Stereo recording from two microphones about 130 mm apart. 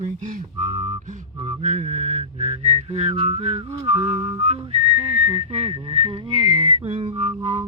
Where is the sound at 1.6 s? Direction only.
65° right (ahead or behind).